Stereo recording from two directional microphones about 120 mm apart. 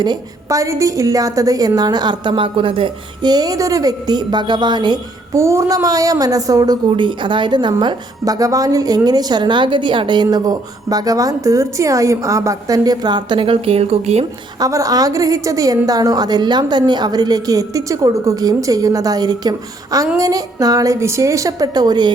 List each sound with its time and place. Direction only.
0.0 s a woman's voice: 30° right (ahead or behind)
5.3 s a woman's voice: 25° right (ahead or behind); by 14.3 s 60° right (ahead or behind)
14.6 s a woman's voice: 30° right (ahead or behind)